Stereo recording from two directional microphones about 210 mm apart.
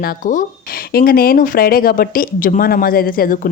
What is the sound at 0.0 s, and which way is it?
Speech, 40° left (ahead or behind).